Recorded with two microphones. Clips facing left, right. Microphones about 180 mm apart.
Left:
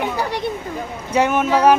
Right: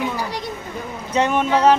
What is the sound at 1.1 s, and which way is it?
Speech, 5° left (ahead or behind).